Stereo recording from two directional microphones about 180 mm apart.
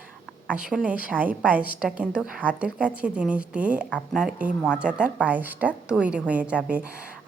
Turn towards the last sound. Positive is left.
turn(degrees=-5)  # may be behind; listen again after turning